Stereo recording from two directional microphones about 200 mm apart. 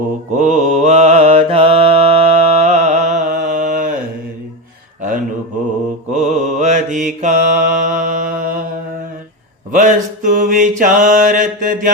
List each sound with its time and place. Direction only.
0.3 s mantra: 35° right (ahead or behind)
6.1 s mantra: 35° right (ahead or behind)
9.7 s mantra: 40° right (ahead or behind)